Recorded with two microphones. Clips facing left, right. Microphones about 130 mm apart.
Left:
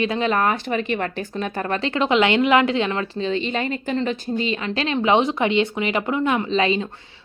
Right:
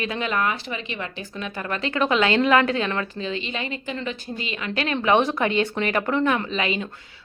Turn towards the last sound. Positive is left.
turn(degrees=30)  # may be behind; listen again after turning